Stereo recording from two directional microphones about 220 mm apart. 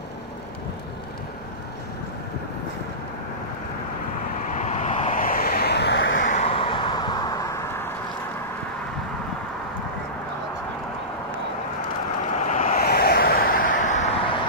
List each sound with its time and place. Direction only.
4.5 s vehicle: 30° left (ahead or behind); by 6.2 s 55° left (ahead or behind)
6.2 s vehicle: 30° left (ahead or behind); by 7.9 s 15° left (ahead or behind)
12.4 s vehicle: 35° left (ahead or behind)